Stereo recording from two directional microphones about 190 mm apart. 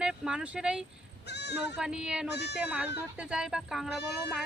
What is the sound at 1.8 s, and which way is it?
Speech, 5° right (ahead or behind).